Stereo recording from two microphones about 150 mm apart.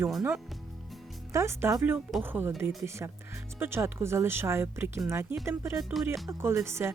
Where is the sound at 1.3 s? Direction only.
20° right (ahead or behind).